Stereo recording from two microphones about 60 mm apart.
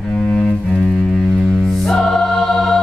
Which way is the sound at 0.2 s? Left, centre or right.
Centre.